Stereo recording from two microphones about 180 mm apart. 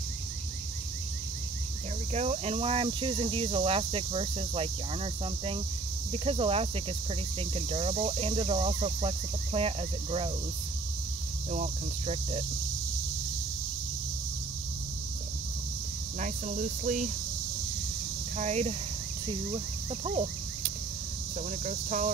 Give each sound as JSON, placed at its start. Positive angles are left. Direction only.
{"t": 2.1, "sound": "speech", "side_deg": -35}
{"t": 11.5, "sound": "speech", "side_deg": -40}
{"t": 16.2, "sound": "speech", "side_deg": -45}
{"t": 18.4, "sound": "speech", "side_deg": -40}
{"t": 21.6, "sound": "speech", "side_deg": -45}